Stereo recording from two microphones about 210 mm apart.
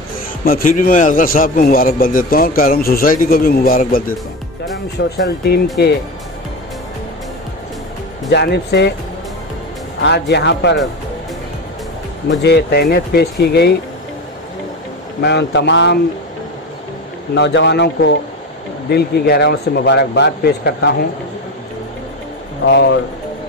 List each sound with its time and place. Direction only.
0.5 s a man's voice: 40° left (ahead or behind)
5.1 s a man's voice: 50° left (ahead or behind)
8.3 s a man's voice: 50° left (ahead or behind)
10.0 s speech: 55° left (ahead or behind)
12.3 s a man's voice: 55° left (ahead or behind)
15.2 s speech: 55° left (ahead or behind)
17.3 s a man's voice: 55° left (ahead or behind)
22.7 s speech: 55° left (ahead or behind)